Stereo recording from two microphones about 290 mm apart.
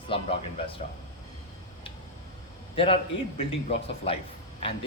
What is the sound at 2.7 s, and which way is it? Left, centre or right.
A man's voice, centre.